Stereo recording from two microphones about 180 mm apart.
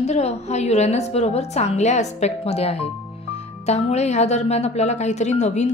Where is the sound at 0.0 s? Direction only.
40° left (ahead or behind).